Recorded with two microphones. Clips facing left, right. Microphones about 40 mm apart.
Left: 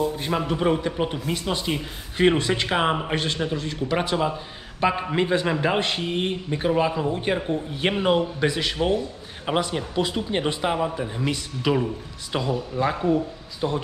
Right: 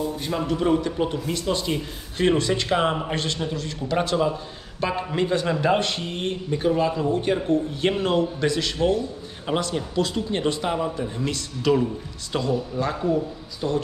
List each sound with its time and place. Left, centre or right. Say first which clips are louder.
0.0 s a man's voice: left 2 dB; centre